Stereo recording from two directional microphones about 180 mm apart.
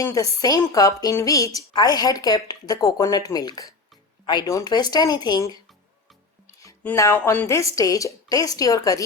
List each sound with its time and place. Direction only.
0.0 s a woman's voice: 20° left (ahead or behind)
6.6 s a woman's voice: 15° left (ahead or behind)